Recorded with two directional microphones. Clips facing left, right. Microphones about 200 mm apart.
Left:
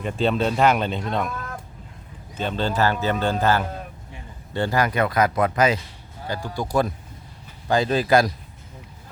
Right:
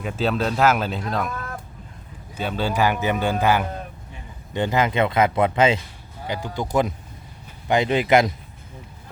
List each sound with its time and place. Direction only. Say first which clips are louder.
0.0 s speech: left 1 dB; 5° right (ahead or behind)
2.3 s speech: even; 10° right (ahead or behind)